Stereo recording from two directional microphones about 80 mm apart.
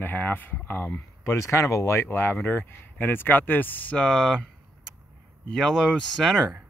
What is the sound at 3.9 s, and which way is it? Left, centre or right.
Speech, centre.